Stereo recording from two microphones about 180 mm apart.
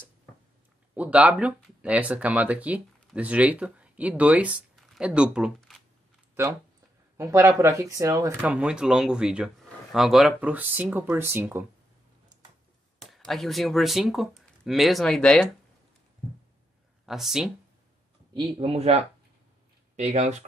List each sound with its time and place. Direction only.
0.9 s speech: 5° right (ahead or behind)
7.2 s speech: 15° right (ahead or behind)
13.0 s speech: centre (ahead or behind)
17.0 s speech: centre (ahead or behind)
18.3 s speech: 30° right (ahead or behind)